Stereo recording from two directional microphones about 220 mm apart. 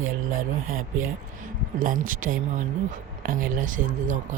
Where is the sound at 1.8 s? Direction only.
40° right (ahead or behind).